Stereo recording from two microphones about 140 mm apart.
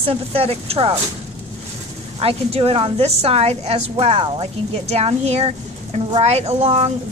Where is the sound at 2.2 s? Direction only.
45° right (ahead or behind).